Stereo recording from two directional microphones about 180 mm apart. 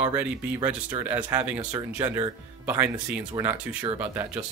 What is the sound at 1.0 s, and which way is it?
Speech, 10° right (ahead or behind).